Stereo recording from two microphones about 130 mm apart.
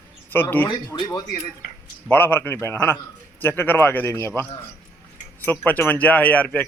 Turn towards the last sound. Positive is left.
turn(degrees=10)  # may be behind; listen again after turning